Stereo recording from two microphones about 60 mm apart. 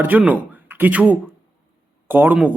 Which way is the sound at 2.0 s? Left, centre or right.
Right.